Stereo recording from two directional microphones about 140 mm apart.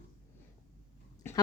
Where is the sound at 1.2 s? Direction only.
20° left (ahead or behind).